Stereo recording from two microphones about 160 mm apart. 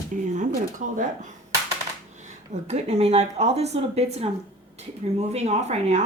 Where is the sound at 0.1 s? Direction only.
55° right (ahead or behind).